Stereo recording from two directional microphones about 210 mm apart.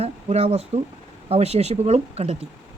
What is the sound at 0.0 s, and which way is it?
Speech, 30° right (ahead or behind).